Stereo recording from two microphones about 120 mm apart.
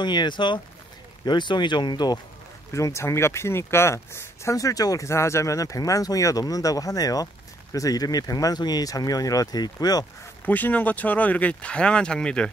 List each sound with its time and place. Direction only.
0.0 s speech: 40° left (ahead or behind)
2.7 s speech: 25° left (ahead or behind)
10.4 s speech: 15° left (ahead or behind)